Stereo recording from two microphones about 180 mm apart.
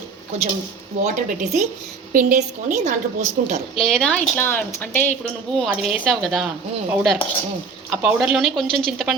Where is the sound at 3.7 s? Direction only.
5° left (ahead or behind).